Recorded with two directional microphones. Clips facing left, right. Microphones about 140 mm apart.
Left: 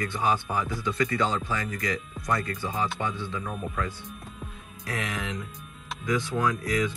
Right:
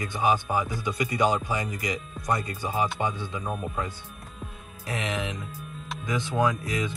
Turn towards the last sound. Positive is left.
turn(degrees=-20)  # may be behind; listen again after turning